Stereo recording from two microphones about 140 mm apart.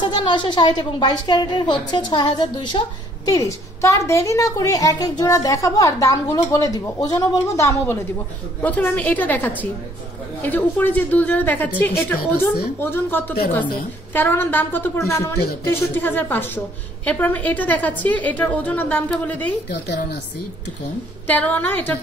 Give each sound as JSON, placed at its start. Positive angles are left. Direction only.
{"t": 0.0, "sound": "a woman's voice", "side_deg": 35}
{"t": 21.3, "sound": "a woman's voice", "side_deg": 10}